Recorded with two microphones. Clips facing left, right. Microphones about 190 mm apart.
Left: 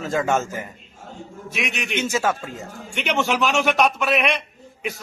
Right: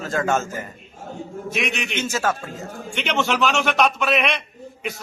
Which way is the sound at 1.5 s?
Centre (ahead or behind).